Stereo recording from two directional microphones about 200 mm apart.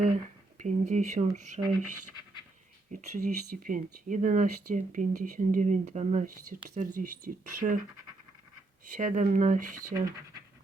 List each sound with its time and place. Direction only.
0.6 s speech: 35° right (ahead or behind)
2.9 s speech: 45° right (ahead or behind)
9.0 s speech: 40° right (ahead or behind)